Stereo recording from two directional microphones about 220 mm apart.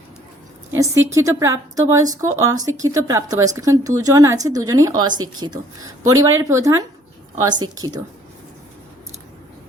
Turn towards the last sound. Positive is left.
turn(degrees=-20)  # may be behind; listen again after turning